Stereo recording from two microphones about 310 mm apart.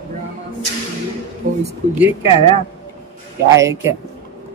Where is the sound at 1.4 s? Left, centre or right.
Right.